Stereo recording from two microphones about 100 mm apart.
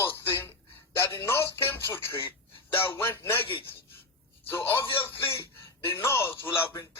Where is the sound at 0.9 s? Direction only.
25° left (ahead or behind).